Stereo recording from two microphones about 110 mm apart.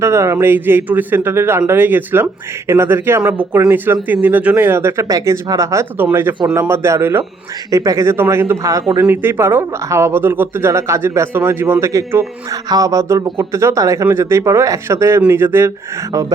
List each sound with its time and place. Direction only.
0.0 s speech: 25° right (ahead or behind)